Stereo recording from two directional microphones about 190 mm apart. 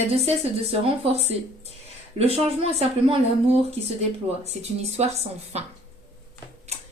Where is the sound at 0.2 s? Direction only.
30° right (ahead or behind).